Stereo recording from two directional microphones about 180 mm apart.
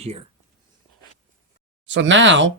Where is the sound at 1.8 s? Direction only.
90° right.